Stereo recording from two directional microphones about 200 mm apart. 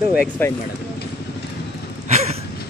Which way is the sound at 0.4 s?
10° left (ahead or behind).